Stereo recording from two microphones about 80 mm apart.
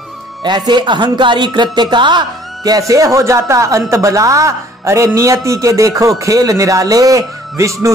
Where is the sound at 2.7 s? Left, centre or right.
Right.